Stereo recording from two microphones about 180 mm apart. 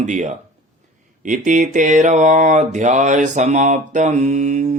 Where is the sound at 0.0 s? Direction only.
40° right (ahead or behind).